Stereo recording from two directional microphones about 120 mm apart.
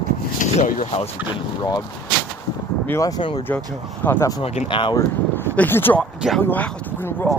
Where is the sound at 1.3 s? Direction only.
35° left (ahead or behind).